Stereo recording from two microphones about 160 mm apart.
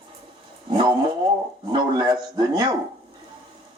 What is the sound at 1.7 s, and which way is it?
A man's voice, 30° right (ahead or behind).